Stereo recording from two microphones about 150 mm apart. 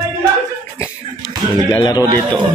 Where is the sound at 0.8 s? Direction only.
25° left (ahead or behind).